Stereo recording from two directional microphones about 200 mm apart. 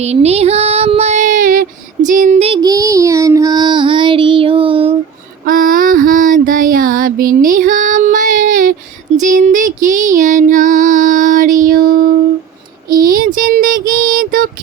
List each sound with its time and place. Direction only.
0.0 s child singing: 30° right (ahead or behind)
2.6 s child singing: 15° right (ahead or behind)
5.5 s a sound: 45° right (ahead or behind)
9.2 s female singing: 40° right (ahead or behind)
12.9 s child singing: 45° right (ahead or behind)